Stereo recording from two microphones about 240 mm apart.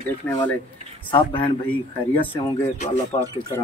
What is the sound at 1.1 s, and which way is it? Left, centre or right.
Speech, left.